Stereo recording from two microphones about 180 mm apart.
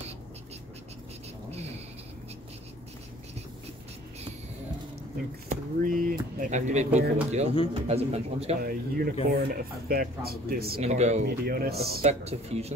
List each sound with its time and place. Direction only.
5.5 s speech: 50° right (ahead or behind)
8.6 s speech: 55° right (ahead or behind)
10.8 s speech: 40° right (ahead or behind)
11.2 s speech: 55° right (ahead or behind)
12.0 s speech: 35° right (ahead or behind)